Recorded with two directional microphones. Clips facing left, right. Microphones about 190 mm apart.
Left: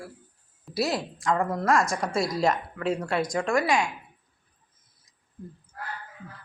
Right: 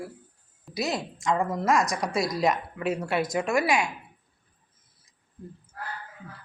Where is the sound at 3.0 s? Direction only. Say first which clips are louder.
Even; 25° right (ahead or behind).